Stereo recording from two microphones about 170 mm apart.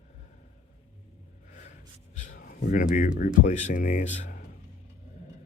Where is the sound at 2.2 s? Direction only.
50° left (ahead or behind).